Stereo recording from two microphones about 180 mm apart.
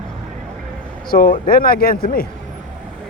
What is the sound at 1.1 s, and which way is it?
Speech, 50° left (ahead or behind).